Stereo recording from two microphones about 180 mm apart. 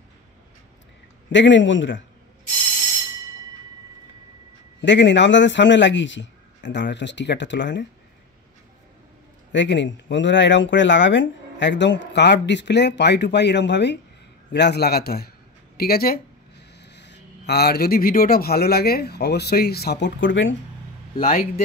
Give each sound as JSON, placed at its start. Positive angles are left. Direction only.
{"t": 1.3, "sound": "speech", "side_deg": 85}
{"t": 4.8, "sound": "a man's voice", "side_deg": 85}
{"t": 9.5, "sound": "a man's voice", "side_deg": 80}